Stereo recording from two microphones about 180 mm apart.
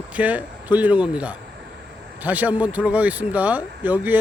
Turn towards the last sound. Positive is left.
turn(degrees=-10)  # may be behind; listen again after turning